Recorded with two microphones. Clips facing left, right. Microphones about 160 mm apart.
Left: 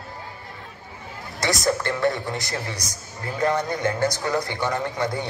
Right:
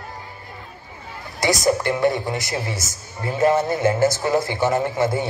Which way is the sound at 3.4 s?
25° right (ahead or behind).